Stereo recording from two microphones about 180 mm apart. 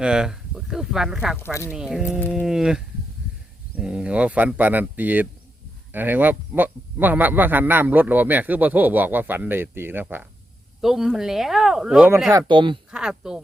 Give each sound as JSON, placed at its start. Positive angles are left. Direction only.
{"t": 0.0, "sound": "speech", "side_deg": -5}
{"t": 2.0, "sound": "speech", "side_deg": 10}
{"t": 2.3, "sound": "speech", "side_deg": -5}
{"t": 12.3, "sound": "speech", "side_deg": -25}
{"t": 12.9, "sound": "speech", "side_deg": -5}